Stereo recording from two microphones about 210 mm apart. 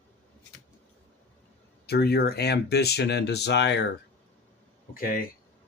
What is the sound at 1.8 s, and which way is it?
Speech, 50° left (ahead or behind).